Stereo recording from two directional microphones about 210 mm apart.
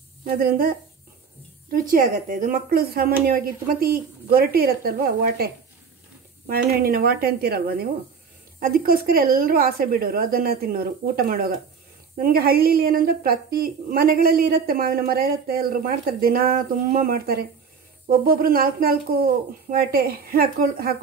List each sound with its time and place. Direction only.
0.2 s a woman's voice: 45° right (ahead or behind)